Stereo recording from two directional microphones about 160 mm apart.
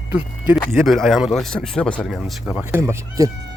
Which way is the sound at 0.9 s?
Centre (ahead or behind).